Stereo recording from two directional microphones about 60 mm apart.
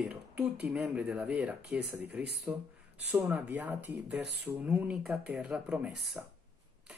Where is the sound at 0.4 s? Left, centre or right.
Right.